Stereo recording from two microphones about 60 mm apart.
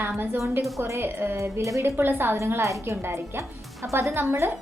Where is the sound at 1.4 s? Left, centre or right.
Right.